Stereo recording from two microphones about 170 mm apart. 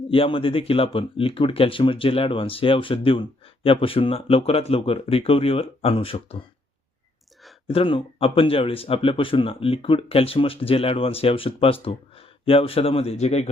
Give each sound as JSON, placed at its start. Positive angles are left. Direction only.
{"t": 0.1, "sound": "speech", "side_deg": 30}
{"t": 7.7, "sound": "speech", "side_deg": 30}